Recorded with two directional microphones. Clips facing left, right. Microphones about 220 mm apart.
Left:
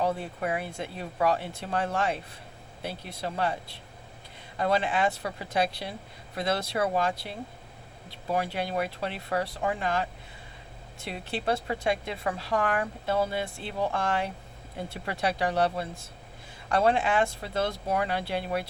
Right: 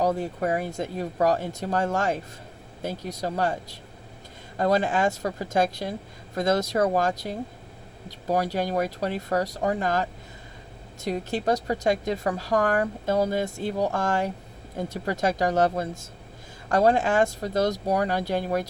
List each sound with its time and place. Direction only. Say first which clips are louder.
0.0 s a woman's voice: right 4 dB; 40° right (ahead or behind)